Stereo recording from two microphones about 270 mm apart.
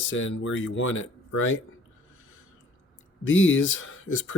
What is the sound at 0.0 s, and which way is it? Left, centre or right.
Speech, left.